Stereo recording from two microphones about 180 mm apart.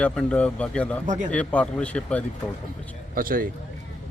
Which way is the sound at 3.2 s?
50° right (ahead or behind).